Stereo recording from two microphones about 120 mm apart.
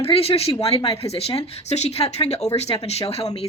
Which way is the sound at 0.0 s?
55° left (ahead or behind).